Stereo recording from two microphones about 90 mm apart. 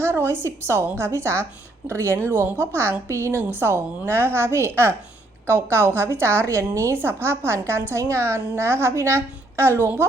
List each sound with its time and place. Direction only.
0.0 s a woman's voice: 30° right (ahead or behind)